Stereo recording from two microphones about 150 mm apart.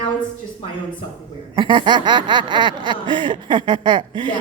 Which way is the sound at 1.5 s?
35° right (ahead or behind).